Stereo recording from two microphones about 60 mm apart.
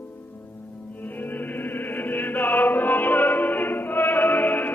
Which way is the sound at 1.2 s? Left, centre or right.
Left.